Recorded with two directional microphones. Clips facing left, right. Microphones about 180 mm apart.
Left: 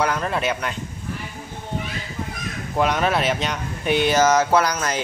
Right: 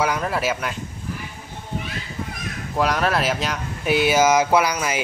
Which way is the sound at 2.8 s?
Centre (ahead or behind).